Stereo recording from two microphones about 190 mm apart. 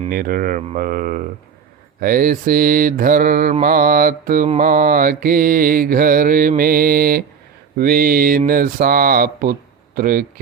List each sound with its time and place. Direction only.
0.1 s mantra: 50° right (ahead or behind)
9.9 s speech: 50° right (ahead or behind)